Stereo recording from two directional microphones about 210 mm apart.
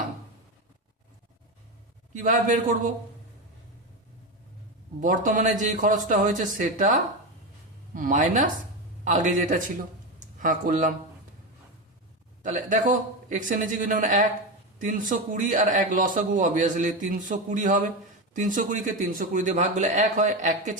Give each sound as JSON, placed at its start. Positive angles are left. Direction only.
{"t": 2.1, "sound": "a man's voice", "side_deg": -40}
{"t": 4.9, "sound": "a man's voice", "side_deg": -40}
{"t": 12.4, "sound": "a man's voice", "side_deg": -35}